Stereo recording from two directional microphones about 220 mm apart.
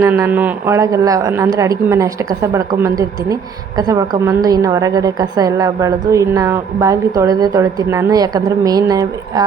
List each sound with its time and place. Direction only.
0.0 s a woman's voice: 10° right (ahead or behind)